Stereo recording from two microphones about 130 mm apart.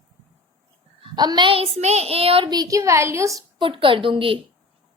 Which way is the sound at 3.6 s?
40° right (ahead or behind).